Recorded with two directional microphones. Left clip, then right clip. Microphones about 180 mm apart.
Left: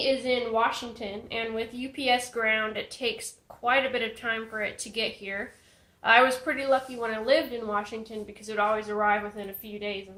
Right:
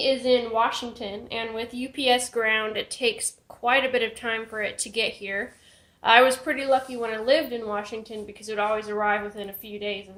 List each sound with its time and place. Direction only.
0.0 s a woman's voice: 35° right (ahead or behind)